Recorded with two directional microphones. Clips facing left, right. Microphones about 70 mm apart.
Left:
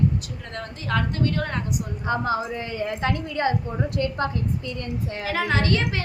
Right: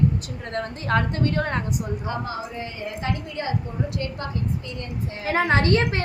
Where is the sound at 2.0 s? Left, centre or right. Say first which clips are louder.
Left 5 dB; left.